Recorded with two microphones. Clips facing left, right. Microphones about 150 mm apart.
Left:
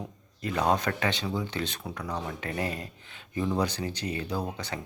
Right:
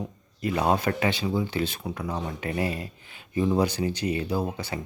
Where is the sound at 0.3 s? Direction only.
10° right (ahead or behind).